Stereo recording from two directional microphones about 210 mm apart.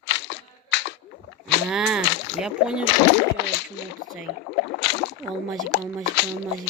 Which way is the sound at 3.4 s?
55° left (ahead or behind).